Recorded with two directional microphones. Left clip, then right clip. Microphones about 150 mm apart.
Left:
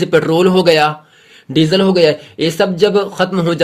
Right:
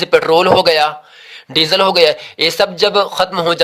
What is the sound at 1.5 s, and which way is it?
Speech, 50° right (ahead or behind).